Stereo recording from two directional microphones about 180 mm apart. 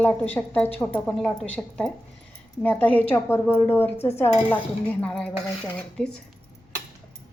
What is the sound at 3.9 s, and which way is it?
Dishes, 35° left (ahead or behind).